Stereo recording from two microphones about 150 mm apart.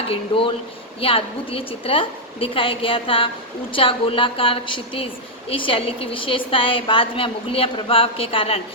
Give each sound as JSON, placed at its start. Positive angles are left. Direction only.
{"t": 0.1, "sound": "a woman's voice", "side_deg": 35}